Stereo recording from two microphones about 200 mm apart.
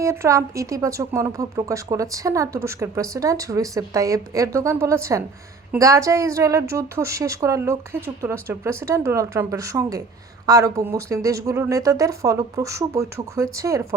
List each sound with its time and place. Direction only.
0.0 s speech: 15° right (ahead or behind)